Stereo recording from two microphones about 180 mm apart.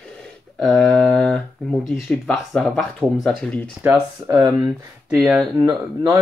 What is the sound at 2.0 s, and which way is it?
Speech, centre (ahead or behind).